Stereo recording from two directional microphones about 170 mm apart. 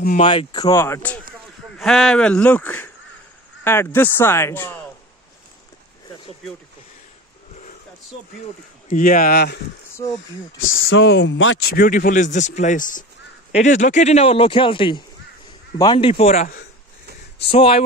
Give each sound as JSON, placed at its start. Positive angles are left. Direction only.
{"t": 0.2, "sound": "speech", "side_deg": 30}
{"t": 8.8, "sound": "speech", "side_deg": 55}
{"t": 11.0, "sound": "speech", "side_deg": 90}
{"t": 11.8, "sound": "a man's voice", "side_deg": 55}
{"t": 17.5, "sound": "speech", "side_deg": 35}